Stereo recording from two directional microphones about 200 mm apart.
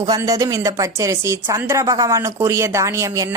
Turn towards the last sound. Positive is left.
turn(degrees=-15)  # may be behind; listen again after turning